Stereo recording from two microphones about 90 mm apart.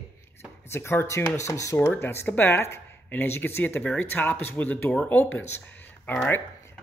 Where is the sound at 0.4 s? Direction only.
30° left (ahead or behind).